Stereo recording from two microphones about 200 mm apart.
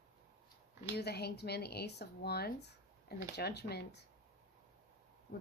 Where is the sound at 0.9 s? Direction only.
55° left (ahead or behind).